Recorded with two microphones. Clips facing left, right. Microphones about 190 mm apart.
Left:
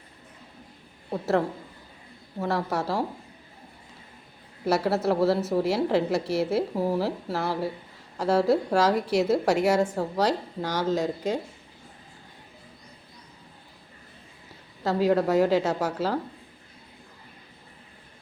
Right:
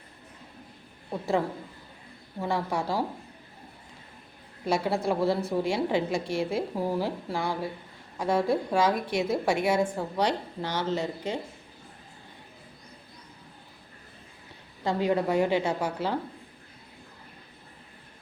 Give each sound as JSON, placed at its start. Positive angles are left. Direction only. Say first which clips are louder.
{"t": 1.2, "sound": "a woman's voice", "louder": "left 2 dB", "side_deg": 0}
{"t": 4.7, "sound": "a woman's voice", "louder": "left 3 dB", "side_deg": 5}
{"t": 8.9, "sound": "a woman's voice", "louder": "left 4 dB", "side_deg": 80}
{"t": 9.2, "sound": "a woman's voice", "louder": "left 2 dB", "side_deg": 10}
{"t": 14.8, "sound": "a woman's voice", "louder": "left 3 dB", "side_deg": 5}